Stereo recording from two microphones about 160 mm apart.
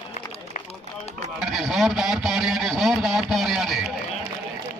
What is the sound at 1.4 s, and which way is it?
Speech, centre (ahead or behind).